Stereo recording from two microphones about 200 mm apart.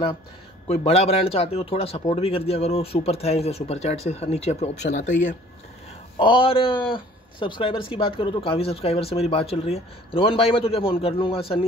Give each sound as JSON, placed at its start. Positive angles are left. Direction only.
{"t": 0.7, "sound": "a man's voice", "side_deg": 30}
{"t": 6.1, "sound": "a man's voice", "side_deg": 25}